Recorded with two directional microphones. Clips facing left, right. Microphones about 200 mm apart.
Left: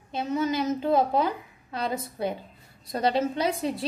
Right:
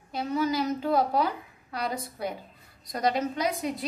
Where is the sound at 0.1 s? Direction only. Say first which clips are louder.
Left 1 dB; 20° left (ahead or behind).